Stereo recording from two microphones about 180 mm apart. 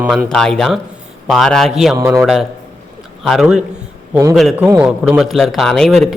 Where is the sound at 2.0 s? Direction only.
20° right (ahead or behind).